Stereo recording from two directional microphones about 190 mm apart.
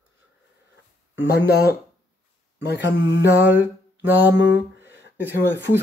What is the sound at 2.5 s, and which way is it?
Speech, 70° left (ahead or behind).